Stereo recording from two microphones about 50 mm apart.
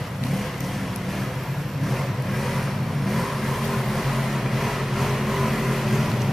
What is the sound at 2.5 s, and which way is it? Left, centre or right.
Vehicle, centre.